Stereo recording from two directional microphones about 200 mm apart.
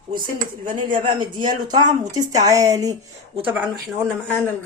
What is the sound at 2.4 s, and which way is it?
A woman's voice, 15° right (ahead or behind).